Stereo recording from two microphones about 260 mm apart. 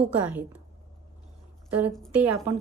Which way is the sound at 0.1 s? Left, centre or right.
Centre.